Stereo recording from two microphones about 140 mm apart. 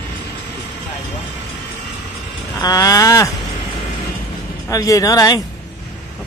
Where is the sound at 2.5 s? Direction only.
25° left (ahead or behind).